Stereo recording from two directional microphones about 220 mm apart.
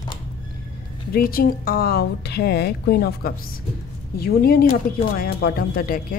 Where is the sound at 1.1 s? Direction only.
40° left (ahead or behind).